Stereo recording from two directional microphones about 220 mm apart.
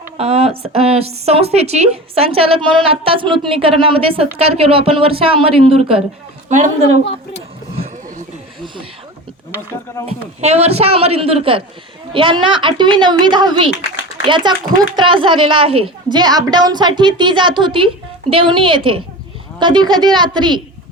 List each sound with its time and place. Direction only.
0.2 s a woman's voice: 25° right (ahead or behind)
7.8 s a sound: 30° right (ahead or behind)
8.6 s speech: 20° right (ahead or behind)
10.1 s a woman's voice: 30° right (ahead or behind)